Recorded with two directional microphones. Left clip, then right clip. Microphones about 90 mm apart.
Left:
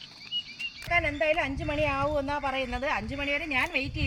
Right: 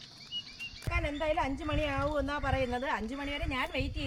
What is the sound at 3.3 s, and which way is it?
Speech, 35° right (ahead or behind).